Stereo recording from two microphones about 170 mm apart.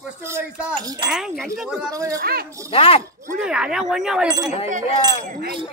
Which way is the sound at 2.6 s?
35° left (ahead or behind).